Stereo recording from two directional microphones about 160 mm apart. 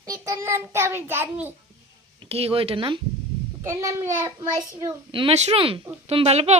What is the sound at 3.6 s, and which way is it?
A child's voice, 20° right (ahead or behind).